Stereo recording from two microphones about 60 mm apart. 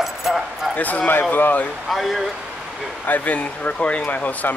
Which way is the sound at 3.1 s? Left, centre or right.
Left.